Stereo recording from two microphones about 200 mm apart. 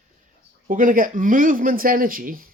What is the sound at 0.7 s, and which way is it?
Speech, 40° right (ahead or behind).